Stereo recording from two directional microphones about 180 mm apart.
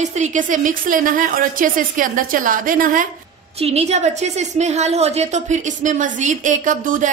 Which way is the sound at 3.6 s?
35° right (ahead or behind).